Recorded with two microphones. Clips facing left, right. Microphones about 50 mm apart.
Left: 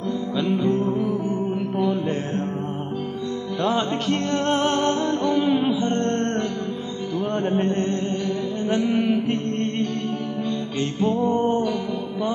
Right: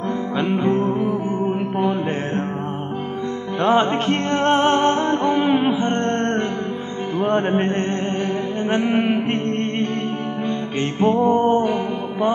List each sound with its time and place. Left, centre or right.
0.4 s music: right
3.6 s music: right
8.6 s mantra: right
10.8 s music: right